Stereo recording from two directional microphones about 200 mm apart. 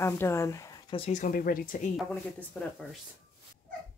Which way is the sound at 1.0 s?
35° left (ahead or behind).